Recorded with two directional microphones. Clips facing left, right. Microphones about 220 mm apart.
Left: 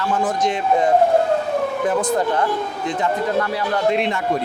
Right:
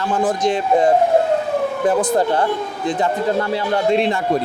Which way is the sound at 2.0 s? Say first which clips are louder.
Right 2 dB; 30° right (ahead or behind).